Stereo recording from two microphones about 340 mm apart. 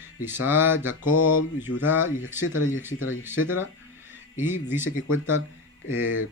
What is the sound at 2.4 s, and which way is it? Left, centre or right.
Speech, centre.